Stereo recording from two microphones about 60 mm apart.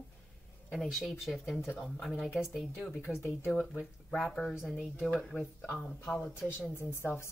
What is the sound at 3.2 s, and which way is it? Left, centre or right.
Speech, left.